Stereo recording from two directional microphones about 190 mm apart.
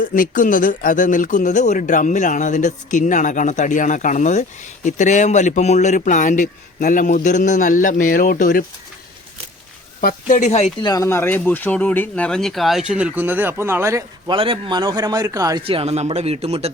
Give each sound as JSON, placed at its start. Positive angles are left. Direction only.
{"t": 0.0, "sound": "speech", "side_deg": 45}
{"t": 10.0, "sound": "speech", "side_deg": 45}
{"t": 10.8, "sound": "speech", "side_deg": 15}
{"t": 14.3, "sound": "a man's voice", "side_deg": -30}
{"t": 15.6, "sound": "speech", "side_deg": -30}